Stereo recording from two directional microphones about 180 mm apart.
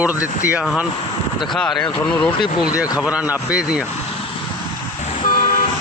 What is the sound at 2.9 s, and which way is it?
Speech, 5° right (ahead or behind).